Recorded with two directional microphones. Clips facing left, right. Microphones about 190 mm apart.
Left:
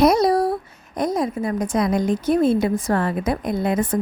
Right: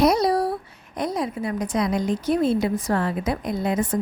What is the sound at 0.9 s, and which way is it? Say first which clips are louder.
A woman's voice: left 4 dB; 45° left (ahead or behind).